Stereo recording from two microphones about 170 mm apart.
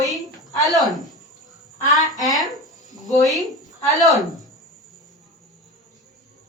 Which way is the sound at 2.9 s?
20° right (ahead or behind).